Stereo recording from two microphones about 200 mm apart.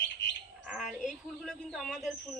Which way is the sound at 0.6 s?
5° right (ahead or behind).